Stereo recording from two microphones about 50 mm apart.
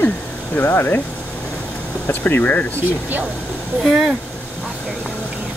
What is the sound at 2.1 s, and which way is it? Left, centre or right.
Speech, left.